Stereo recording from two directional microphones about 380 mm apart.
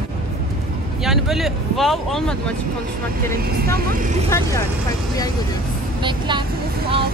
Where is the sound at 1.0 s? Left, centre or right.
Centre.